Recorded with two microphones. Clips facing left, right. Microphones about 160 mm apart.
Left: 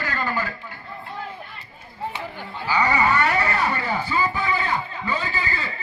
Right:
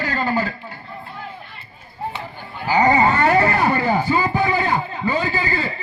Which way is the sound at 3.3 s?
40° right (ahead or behind).